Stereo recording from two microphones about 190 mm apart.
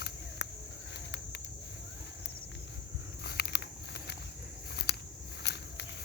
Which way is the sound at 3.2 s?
60° left (ahead or behind).